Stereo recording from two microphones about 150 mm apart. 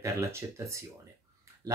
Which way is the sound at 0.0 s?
20° right (ahead or behind).